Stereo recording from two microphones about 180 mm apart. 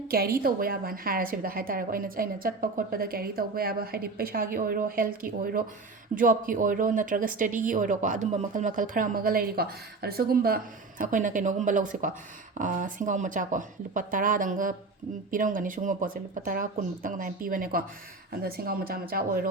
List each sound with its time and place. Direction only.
0.1 s a woman's voice: 55° right (ahead or behind)